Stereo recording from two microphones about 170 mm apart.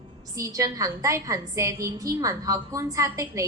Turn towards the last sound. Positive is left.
turn(degrees=-20)  # may be behind; listen again after turning